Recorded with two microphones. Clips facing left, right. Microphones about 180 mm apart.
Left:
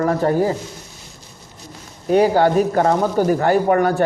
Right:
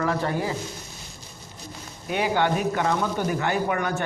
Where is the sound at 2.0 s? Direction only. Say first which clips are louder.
Left 9 dB; 40° left (ahead or behind).